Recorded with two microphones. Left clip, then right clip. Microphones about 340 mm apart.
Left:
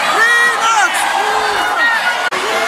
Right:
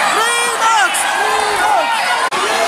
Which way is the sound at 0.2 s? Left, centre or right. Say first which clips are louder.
Left 3 dB; centre.